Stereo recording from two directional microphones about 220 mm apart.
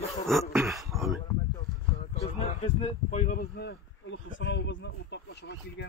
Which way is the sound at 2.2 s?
30° left (ahead or behind).